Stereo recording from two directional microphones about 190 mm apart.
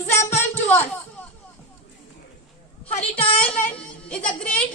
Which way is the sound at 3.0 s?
30° left (ahead or behind).